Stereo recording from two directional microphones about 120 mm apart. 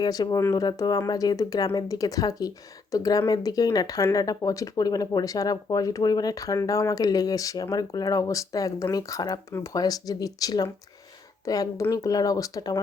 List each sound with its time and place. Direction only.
0.0 s speech: 30° left (ahead or behind)